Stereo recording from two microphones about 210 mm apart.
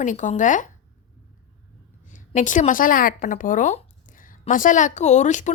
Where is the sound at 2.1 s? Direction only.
35° left (ahead or behind).